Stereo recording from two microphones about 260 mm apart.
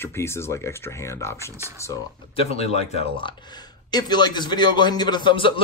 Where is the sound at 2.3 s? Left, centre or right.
Left.